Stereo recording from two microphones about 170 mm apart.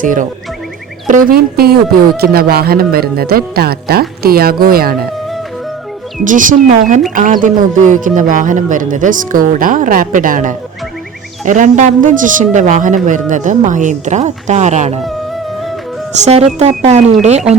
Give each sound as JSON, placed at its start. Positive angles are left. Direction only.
{"t": 0.0, "sound": "speech", "side_deg": -50}
{"t": 6.2, "sound": "speech", "side_deg": -50}
{"t": 16.2, "sound": "speech", "side_deg": -40}